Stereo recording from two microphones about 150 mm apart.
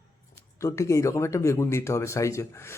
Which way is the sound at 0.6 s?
20° left (ahead or behind).